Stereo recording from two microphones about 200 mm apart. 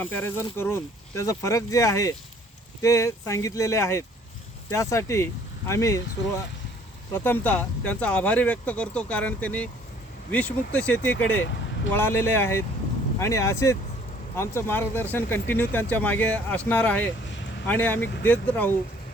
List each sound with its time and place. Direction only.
0.0 s speech: 10° left (ahead or behind)
7.1 s speech: 10° left (ahead or behind)
11.3 s speech: 65° left (ahead or behind)
11.9 s speech: 10° left (ahead or behind)
17.2 s a sound: 60° left (ahead or behind)
17.7 s speech: 10° left (ahead or behind)
18.0 s speech: 55° left (ahead or behind)
18.3 s speech: 5° left (ahead or behind)